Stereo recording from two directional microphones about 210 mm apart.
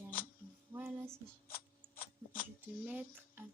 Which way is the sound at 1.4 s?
45° left (ahead or behind).